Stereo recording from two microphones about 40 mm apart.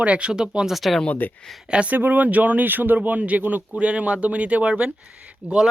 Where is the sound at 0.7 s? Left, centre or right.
Centre.